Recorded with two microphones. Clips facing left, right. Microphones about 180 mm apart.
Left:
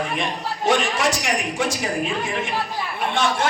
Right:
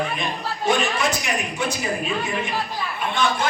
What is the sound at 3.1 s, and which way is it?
Speech, 85° left.